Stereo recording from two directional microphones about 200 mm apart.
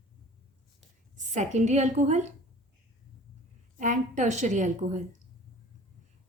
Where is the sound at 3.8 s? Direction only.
40° right (ahead or behind).